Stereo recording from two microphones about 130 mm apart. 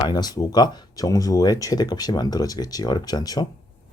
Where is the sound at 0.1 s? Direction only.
30° left (ahead or behind).